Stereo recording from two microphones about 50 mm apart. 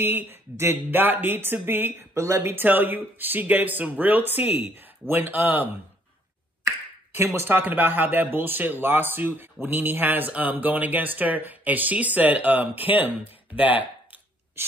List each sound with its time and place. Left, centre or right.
0.0 s speech: right
2.1 s speech: right
2.5 s speech: right
7.2 s speech: right